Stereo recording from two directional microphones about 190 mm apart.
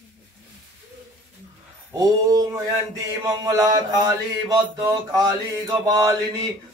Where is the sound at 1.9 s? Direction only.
20° right (ahead or behind).